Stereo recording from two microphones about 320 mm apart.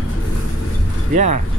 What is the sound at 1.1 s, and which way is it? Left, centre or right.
Speech, right.